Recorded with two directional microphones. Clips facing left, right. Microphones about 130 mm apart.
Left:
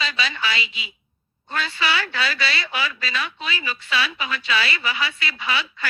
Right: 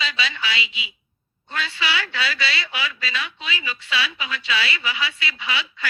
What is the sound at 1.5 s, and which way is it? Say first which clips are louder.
A woman's voice: left 2 dB; 45° left (ahead or behind).